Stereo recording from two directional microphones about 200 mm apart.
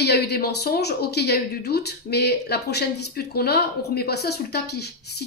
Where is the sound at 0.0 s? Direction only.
55° left (ahead or behind).